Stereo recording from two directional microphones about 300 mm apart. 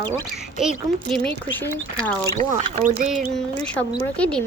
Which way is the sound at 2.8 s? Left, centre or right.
Right.